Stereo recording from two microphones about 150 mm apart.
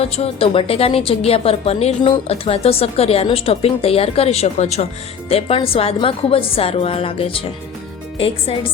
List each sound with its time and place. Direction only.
0.0 s a woman's voice: 40° left (ahead or behind)